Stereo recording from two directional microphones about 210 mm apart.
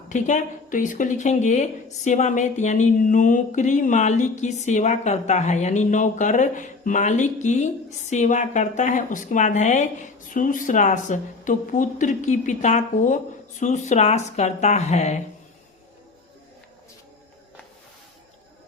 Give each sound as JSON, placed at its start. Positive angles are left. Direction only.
{"t": 0.1, "sound": "a woman's voice", "side_deg": 35}